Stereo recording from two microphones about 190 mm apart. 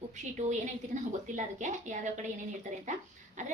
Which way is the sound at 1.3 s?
40° right (ahead or behind).